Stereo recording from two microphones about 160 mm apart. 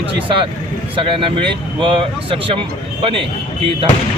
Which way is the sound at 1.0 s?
35° right (ahead or behind).